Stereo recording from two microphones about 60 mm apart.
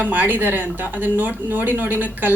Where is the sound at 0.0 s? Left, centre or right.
Right.